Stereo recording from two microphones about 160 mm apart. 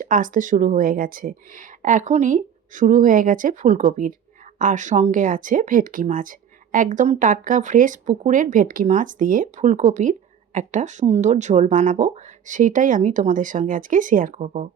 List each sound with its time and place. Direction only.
0.0 s speech: 55° right (ahead or behind)